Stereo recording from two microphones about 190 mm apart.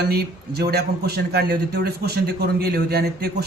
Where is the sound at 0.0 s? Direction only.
60° right (ahead or behind).